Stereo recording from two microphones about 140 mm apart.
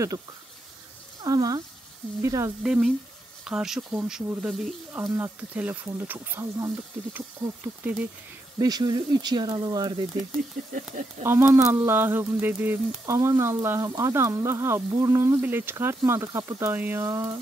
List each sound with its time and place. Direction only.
1.2 s speech: 25° right (ahead or behind)
2.6 s speech: 5° right (ahead or behind)
5.1 s speech: 15° right (ahead or behind)
8.5 s speech: 30° right (ahead or behind)
10.7 s speech: 65° right (ahead or behind)
11.2 s speech: 15° right (ahead or behind)